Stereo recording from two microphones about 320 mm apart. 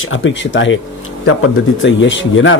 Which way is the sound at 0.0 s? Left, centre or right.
Left.